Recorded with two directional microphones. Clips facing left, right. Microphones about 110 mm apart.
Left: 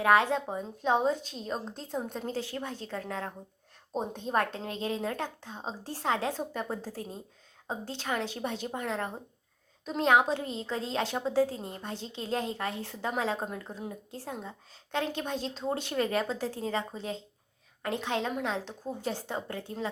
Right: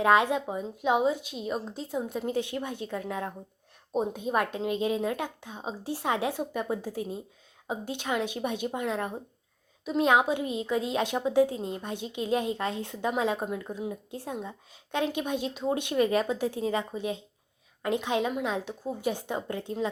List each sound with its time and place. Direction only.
0.0 s a woman's voice: 20° right (ahead or behind)
10.1 s a woman's voice: 15° right (ahead or behind)